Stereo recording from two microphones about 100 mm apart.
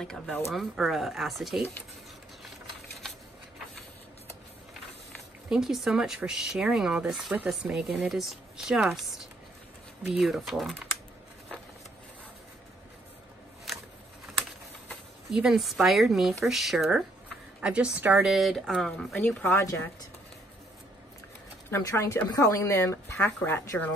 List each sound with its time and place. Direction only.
0.0 s speech: 5° left (ahead or behind)
5.5 s speech: 5° right (ahead or behind)
15.2 s speech: 5° right (ahead or behind)
18.3 s speech: centre (ahead or behind); by 19.5 s 15° left (ahead or behind)
19.5 s speech: 35° left (ahead or behind)
21.6 s speech: 30° left (ahead or behind)